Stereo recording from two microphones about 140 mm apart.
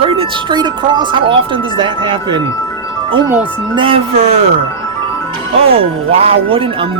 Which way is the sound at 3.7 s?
40° right (ahead or behind).